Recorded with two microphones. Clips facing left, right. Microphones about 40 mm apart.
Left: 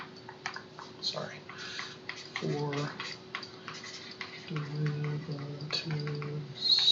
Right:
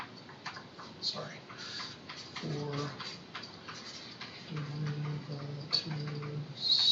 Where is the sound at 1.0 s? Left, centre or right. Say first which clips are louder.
Left 3 dB; left.